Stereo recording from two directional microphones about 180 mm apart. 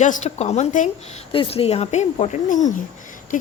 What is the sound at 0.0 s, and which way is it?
Speech, 40° left (ahead or behind).